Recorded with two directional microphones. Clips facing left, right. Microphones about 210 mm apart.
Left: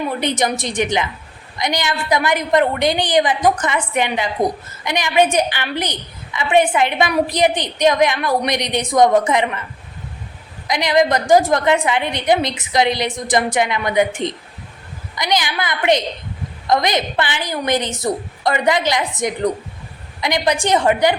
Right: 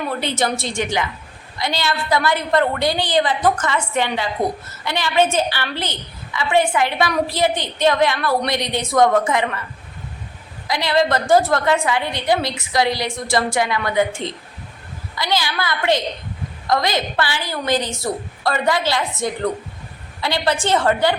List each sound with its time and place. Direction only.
0.1 s a woman's voice: 15° left (ahead or behind)
10.7 s a woman's voice: 15° left (ahead or behind)